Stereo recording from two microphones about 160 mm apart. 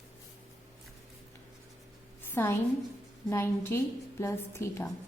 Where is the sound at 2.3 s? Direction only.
15° left (ahead or behind).